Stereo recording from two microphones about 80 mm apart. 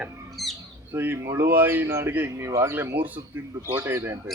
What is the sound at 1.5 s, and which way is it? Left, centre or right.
Speech, right.